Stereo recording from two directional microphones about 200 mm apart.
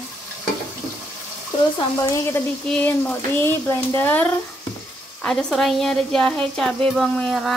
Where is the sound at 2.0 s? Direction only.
15° left (ahead or behind).